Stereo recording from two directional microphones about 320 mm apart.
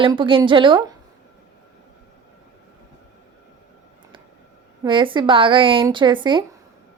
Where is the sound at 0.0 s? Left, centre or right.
Centre.